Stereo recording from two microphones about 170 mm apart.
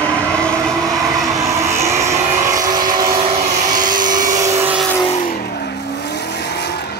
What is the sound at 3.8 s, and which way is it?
Vehicle, 50° right (ahead or behind).